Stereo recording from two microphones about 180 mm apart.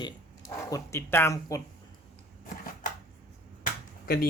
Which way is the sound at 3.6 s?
60° left (ahead or behind).